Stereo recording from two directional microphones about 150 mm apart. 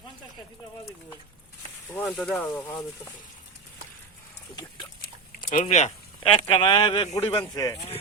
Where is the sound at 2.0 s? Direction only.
5° left (ahead or behind).